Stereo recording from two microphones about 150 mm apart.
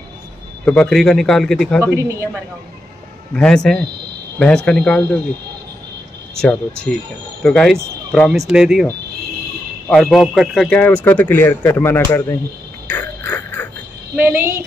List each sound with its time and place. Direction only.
0.7 s a man's voice: 5° left (ahead or behind)
2.0 s speech: 20° right (ahead or behind)
3.3 s a man's voice: 5° left (ahead or behind)
6.3 s a man's voice: 5° left (ahead or behind)
9.8 s a man's voice: centre (ahead or behind); by 12.4 s 15° left (ahead or behind)
12.9 s a sound: 15° left (ahead or behind)
14.1 s a woman's voice: 10° right (ahead or behind)